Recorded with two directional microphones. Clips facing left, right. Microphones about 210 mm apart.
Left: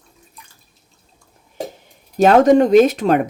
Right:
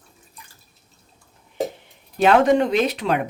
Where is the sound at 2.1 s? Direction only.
40° left (ahead or behind).